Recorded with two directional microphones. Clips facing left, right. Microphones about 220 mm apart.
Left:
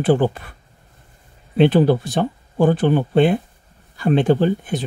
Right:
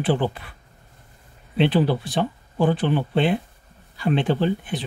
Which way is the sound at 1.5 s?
45° left (ahead or behind).